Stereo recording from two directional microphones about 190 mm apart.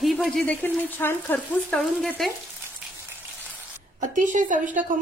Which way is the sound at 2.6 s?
10° right (ahead or behind).